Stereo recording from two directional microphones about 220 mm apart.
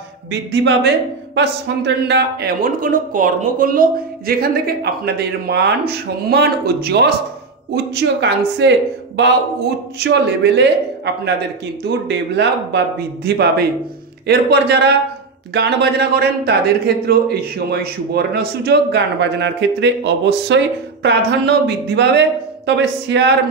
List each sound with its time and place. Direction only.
0.3 s speech: 50° right (ahead or behind)
11.8 s speech: 50° right (ahead or behind)